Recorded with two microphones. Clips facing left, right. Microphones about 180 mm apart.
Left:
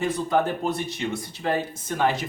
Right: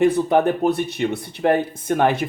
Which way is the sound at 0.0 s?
60° right (ahead or behind).